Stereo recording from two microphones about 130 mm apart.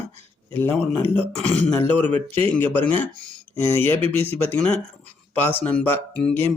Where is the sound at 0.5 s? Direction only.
15° left (ahead or behind).